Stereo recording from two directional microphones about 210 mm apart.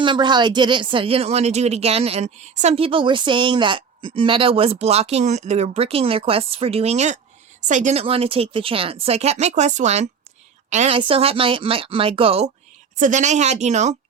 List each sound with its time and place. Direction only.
0.0 s speech: 20° right (ahead or behind)